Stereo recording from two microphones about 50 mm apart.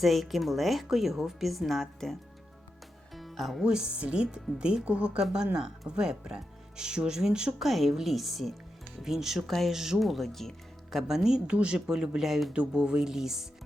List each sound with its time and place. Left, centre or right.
0.0 s speech: centre
3.2 s music: centre
3.6 s speech: centre
7.6 s speech: centre
9.7 s speech: centre
11.1 s speech: centre